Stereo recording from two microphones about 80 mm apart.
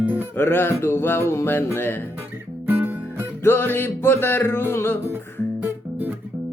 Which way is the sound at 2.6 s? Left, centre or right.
Right.